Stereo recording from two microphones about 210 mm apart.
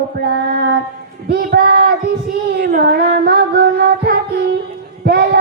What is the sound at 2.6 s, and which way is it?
Music, 50° right (ahead or behind).